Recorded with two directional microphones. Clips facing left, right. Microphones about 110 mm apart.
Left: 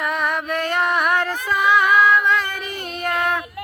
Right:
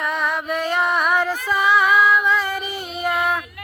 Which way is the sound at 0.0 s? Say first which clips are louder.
Even; centre (ahead or behind).